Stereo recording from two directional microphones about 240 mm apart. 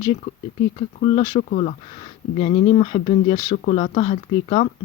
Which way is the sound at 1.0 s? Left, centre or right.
Left.